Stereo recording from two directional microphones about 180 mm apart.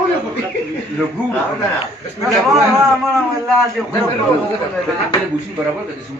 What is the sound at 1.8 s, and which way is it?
Speech, 20° right (ahead or behind).